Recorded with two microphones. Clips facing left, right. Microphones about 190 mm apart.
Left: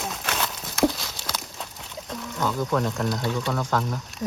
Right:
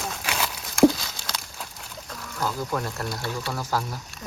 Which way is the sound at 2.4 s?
5° right (ahead or behind).